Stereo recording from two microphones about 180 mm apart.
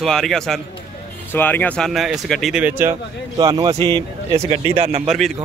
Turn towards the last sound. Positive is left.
turn(degrees=-30)  # may be behind; listen again after turning